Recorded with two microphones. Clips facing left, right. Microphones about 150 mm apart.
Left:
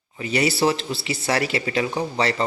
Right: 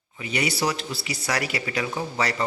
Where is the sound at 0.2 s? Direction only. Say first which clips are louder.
Left 5 dB; 35° left (ahead or behind).